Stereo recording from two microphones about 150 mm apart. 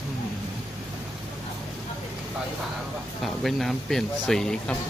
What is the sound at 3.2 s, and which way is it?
Speech, centre (ahead or behind).